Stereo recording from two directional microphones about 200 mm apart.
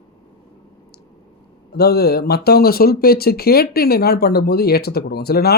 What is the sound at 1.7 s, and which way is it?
Speech, 50° left (ahead or behind).